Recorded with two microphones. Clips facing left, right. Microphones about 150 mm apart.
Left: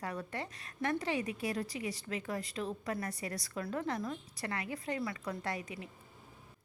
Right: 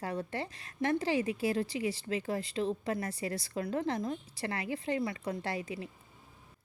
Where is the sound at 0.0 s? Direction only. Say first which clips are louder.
Right 4 dB; 30° right (ahead or behind).